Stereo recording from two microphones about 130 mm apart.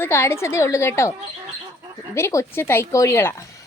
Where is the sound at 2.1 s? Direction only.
20° left (ahead or behind).